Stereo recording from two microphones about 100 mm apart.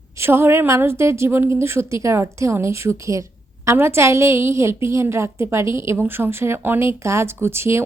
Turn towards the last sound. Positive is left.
turn(degrees=-25)  # may be behind; listen again after turning